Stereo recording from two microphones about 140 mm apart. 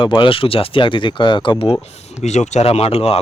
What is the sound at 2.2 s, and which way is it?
Speech, 55° left (ahead or behind).